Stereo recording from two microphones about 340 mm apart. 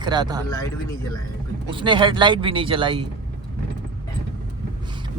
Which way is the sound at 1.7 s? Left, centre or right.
Centre.